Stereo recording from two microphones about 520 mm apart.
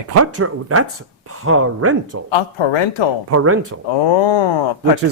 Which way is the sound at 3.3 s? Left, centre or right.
Right.